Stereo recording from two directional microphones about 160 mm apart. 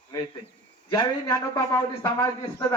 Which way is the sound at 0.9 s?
25° left (ahead or behind).